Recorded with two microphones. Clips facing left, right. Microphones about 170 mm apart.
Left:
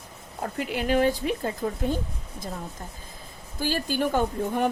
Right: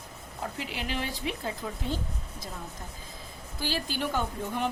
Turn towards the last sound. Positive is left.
turn(degrees=50)  # may be behind; listen again after turning